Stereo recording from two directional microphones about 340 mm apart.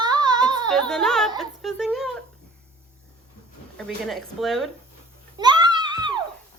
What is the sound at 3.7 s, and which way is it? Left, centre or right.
Speech, centre.